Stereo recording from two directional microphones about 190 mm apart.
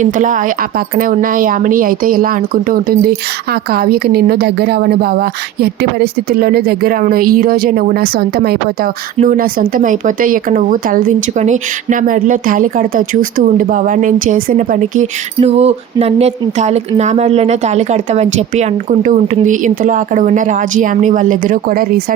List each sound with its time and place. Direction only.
0.0 s a woman's voice: 40° right (ahead or behind)